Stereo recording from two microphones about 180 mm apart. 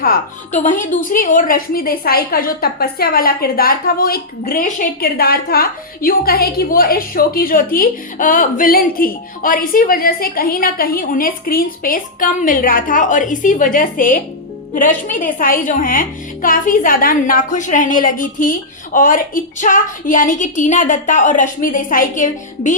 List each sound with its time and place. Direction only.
0.0 s a woman's voice: 50° left (ahead or behind)